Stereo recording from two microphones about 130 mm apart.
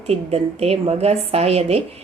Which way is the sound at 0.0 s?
50° right (ahead or behind).